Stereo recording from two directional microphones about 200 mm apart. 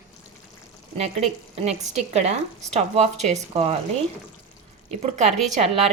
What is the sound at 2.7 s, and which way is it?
Speech, 35° right (ahead or behind).